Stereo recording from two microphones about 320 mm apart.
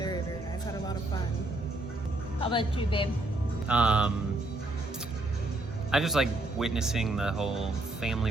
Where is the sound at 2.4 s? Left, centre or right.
Centre.